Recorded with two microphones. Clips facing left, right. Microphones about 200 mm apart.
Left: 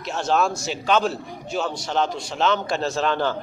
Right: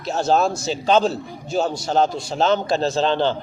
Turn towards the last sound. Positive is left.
turn(degrees=-30)  # may be behind; listen again after turning